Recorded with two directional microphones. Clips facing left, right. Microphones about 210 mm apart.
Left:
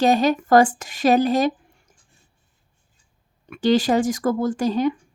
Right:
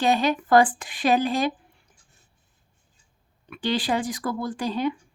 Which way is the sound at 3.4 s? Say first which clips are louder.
Left 7 dB; 45° left (ahead or behind).